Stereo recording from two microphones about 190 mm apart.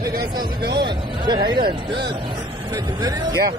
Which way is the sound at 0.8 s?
25° right (ahead or behind).